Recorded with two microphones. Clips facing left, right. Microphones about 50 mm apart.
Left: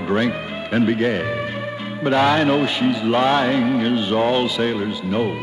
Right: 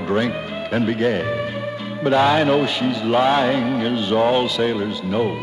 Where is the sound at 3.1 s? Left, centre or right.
Centre.